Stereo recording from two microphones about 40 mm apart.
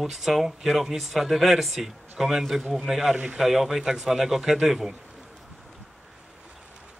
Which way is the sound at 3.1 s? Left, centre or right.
Right.